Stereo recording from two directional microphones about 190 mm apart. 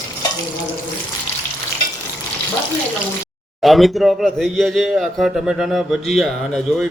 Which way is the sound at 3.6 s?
Centre (ahead or behind).